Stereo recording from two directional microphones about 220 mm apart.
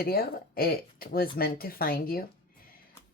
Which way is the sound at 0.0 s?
45° left (ahead or behind).